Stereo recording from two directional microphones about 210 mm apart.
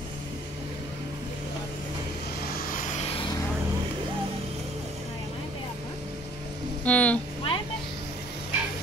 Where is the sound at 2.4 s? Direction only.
45° left (ahead or behind).